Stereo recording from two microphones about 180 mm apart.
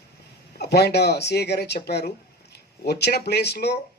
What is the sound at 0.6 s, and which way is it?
Speech, 65° left (ahead or behind).